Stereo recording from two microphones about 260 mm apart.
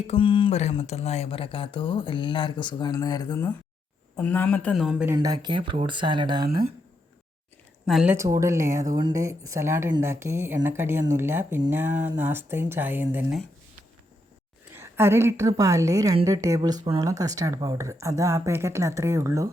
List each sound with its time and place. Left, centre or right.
0.1 s speech: centre
5.1 s a woman's voice: centre
7.9 s a woman's voice: centre
14.8 s a woman's voice: centre